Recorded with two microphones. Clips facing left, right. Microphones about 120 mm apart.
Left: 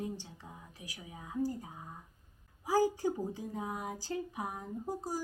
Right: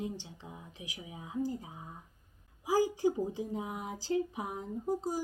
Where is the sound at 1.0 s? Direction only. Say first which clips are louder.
Right 2 dB; 20° right (ahead or behind).